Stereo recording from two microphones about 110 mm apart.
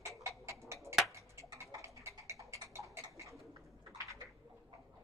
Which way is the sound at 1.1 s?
25° right (ahead or behind).